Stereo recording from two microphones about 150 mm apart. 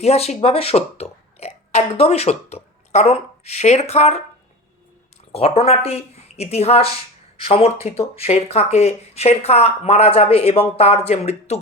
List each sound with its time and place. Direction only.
0.0 s speech: 45° left (ahead or behind)
5.3 s speech: 40° left (ahead or behind)